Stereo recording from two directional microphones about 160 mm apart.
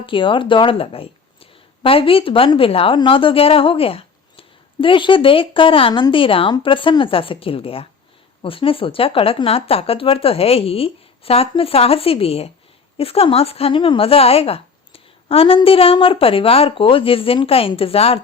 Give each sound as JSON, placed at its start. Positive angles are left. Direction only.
{"t": 0.0, "sound": "a woman's voice", "side_deg": 30}